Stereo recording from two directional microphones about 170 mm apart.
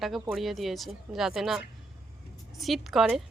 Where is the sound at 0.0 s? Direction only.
Centre (ahead or behind).